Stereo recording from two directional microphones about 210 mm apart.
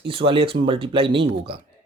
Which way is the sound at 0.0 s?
25° right (ahead or behind).